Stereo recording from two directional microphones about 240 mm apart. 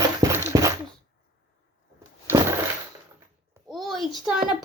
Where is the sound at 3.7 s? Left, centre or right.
Centre.